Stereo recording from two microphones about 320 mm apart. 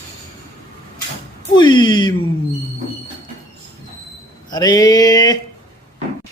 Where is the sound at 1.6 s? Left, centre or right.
Centre.